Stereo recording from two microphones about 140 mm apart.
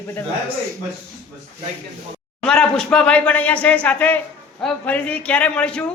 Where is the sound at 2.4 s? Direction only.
5° left (ahead or behind).